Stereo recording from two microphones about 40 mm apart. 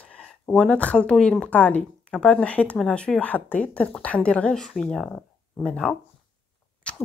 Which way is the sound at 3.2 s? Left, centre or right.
Left.